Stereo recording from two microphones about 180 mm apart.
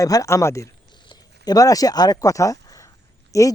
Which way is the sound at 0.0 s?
20° left (ahead or behind).